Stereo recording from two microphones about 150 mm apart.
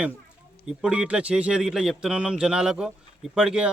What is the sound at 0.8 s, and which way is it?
Speech, 5° right (ahead or behind).